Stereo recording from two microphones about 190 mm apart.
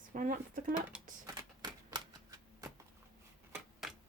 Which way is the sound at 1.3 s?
20° right (ahead or behind).